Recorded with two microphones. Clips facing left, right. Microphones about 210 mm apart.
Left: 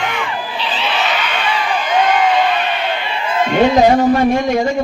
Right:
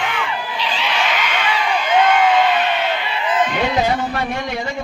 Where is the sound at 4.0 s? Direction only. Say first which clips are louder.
Left 10 dB; 40° left (ahead or behind).